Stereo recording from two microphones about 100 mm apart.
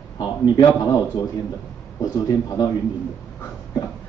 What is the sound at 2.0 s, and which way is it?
Speech, 40° left (ahead or behind).